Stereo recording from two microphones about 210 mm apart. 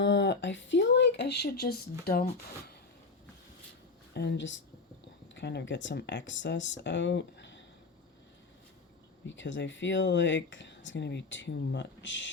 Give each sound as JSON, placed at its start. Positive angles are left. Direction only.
{"t": 0.0, "sound": "speech", "side_deg": 55}
{"t": 4.1, "sound": "speech", "side_deg": 55}
{"t": 9.3, "sound": "speech", "side_deg": 60}